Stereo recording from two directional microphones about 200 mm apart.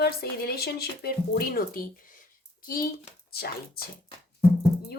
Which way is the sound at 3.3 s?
50° left (ahead or behind).